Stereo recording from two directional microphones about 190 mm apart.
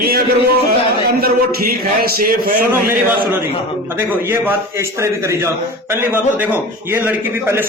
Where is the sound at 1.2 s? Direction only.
50° right (ahead or behind).